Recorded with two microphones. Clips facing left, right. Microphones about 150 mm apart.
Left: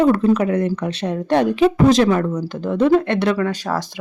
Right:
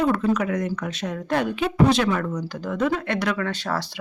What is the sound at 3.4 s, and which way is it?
Speech, 15° left (ahead or behind).